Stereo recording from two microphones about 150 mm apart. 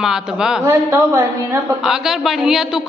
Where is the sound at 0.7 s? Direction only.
20° right (ahead or behind).